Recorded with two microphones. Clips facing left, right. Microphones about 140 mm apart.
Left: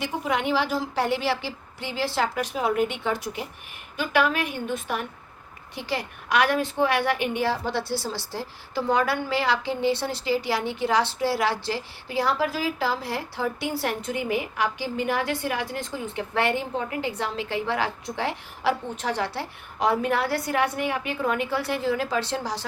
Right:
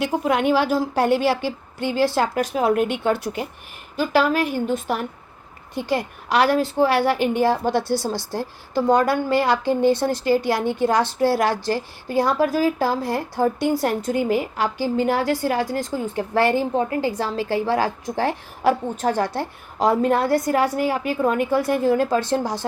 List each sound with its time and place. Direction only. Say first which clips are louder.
0.0 s a woman's voice: right 6 dB; 55° right (ahead or behind)
2.6 s speech: right 4 dB; 65° right (ahead or behind)
5.7 s a woman's voice: right 7 dB; 50° right (ahead or behind)
6.3 s a woman's voice: right 4 dB; 35° right (ahead or behind)
7.9 s speech: right 6 dB; 15° right (ahead or behind)
8.3 s a woman's voice: right 6 dB; 50° right (ahead or behind)
20.6 s a woman's voice: right 5 dB; 35° right (ahead or behind); by 22.6 s 50° right (ahead or behind)